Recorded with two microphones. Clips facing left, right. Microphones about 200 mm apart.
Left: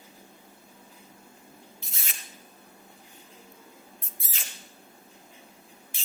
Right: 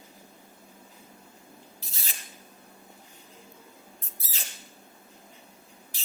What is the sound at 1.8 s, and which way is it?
Spray, 35° right (ahead or behind).